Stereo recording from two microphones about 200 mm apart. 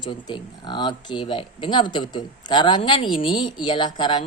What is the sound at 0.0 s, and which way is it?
Speech, 20° left (ahead or behind).